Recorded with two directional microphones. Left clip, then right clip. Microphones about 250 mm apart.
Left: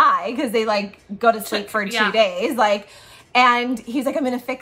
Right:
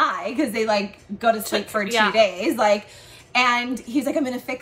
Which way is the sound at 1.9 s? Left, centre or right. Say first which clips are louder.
Right 2 dB; centre.